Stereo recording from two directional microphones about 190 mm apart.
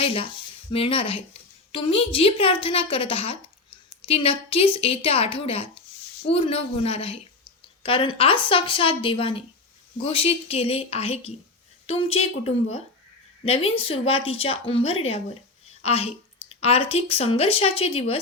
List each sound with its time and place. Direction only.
0.0 s a woman's voice: 30° left (ahead or behind)